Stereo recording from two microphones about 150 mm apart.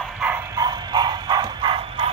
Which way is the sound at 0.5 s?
30° right (ahead or behind).